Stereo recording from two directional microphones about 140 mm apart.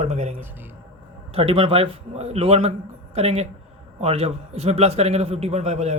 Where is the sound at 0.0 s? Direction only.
50° right (ahead or behind).